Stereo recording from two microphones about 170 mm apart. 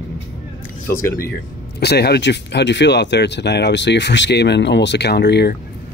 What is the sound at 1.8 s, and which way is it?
Speech, 70° left (ahead or behind).